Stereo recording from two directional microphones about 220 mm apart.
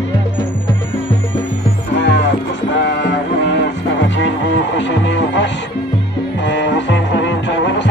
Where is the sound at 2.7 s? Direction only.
50° left (ahead or behind).